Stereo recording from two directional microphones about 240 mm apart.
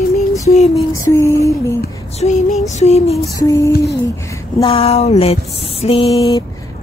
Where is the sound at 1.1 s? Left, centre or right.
Centre.